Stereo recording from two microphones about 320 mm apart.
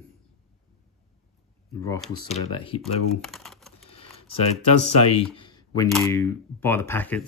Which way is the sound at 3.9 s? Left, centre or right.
Centre.